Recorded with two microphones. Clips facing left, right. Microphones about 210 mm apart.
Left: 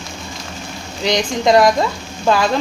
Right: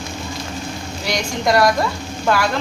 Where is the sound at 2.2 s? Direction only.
20° left (ahead or behind).